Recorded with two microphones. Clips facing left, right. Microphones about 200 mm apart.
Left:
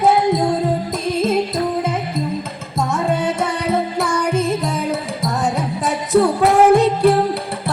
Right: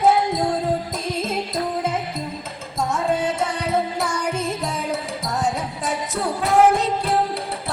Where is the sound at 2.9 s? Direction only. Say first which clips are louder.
Left 2 dB; 65° left (ahead or behind).